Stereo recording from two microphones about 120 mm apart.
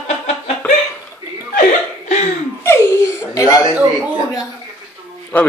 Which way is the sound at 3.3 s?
30° left (ahead or behind).